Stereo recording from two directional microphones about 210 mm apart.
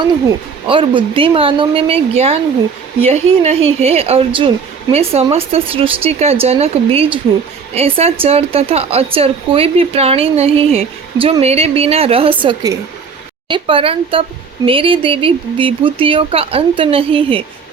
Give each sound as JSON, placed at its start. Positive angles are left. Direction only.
{"t": 0.3, "sound": "speech", "side_deg": -25}